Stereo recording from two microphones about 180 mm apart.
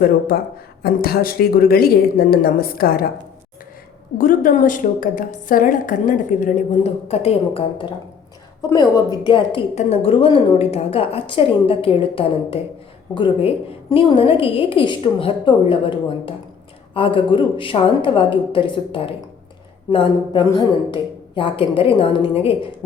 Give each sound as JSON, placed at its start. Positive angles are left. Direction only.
{"t": 0.8, "sound": "speech", "side_deg": 60}
{"t": 4.2, "sound": "a woman's voice", "side_deg": 50}